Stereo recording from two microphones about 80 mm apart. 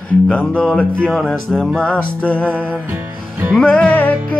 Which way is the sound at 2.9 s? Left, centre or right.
Centre.